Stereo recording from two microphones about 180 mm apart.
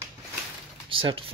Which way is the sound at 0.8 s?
30° right (ahead or behind).